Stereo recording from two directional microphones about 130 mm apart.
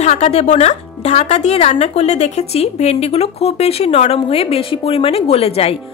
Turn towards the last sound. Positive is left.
turn(degrees=50)  # may be behind; listen again after turning